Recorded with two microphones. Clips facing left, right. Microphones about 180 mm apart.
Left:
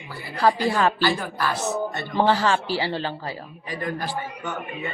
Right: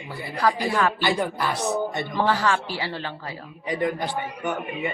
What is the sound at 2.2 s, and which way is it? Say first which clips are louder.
A man's voice: left 3 dB; 30° left (ahead or behind).